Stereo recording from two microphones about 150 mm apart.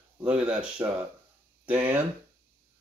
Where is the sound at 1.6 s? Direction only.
10° right (ahead or behind).